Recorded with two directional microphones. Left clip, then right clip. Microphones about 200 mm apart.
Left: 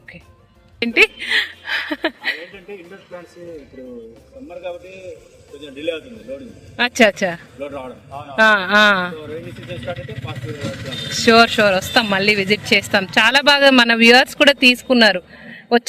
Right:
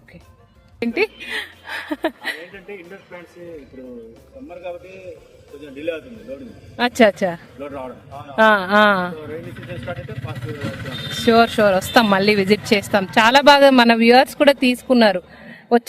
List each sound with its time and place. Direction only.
0.8 s a sound: centre (ahead or behind)
2.9 s speech: centre (ahead or behind)
5.5 s speech: centre (ahead or behind)
8.1 s a man's voice: 35° left (ahead or behind)
8.4 s speech: 10° right (ahead or behind)
9.1 s speech: centre (ahead or behind)